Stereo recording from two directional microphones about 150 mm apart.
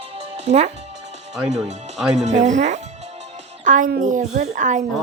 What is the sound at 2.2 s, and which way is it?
Speech, 50° right (ahead or behind).